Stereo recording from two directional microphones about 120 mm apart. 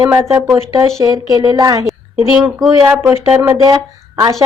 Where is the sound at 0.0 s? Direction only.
25° right (ahead or behind).